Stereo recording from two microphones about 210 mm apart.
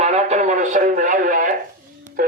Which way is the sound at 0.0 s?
30° right (ahead or behind).